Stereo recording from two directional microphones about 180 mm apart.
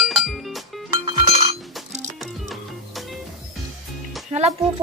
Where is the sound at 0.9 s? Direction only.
25° right (ahead or behind).